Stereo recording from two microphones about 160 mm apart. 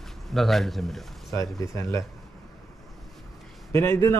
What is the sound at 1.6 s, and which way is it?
Speech, 20° left (ahead or behind).